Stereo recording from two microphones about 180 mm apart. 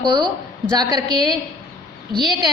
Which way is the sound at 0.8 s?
25° right (ahead or behind).